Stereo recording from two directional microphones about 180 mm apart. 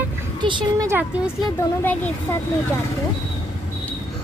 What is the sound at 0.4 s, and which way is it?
Speech, 25° right (ahead or behind).